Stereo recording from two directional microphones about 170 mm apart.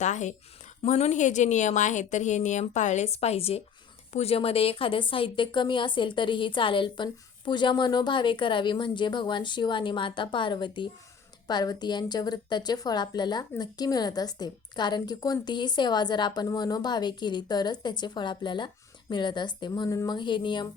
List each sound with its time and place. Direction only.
0.0 s a woman's voice: 45° left (ahead or behind); by 20.7 s 30° left (ahead or behind)